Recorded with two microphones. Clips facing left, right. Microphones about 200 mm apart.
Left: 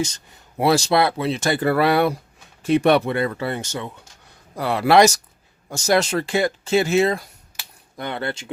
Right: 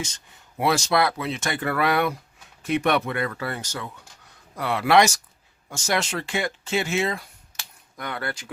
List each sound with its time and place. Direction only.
0.5 s speech: 35° left (ahead or behind)
7.9 s speech: 25° left (ahead or behind)